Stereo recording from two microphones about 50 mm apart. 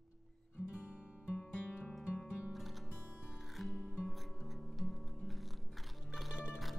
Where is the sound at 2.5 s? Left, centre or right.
Centre.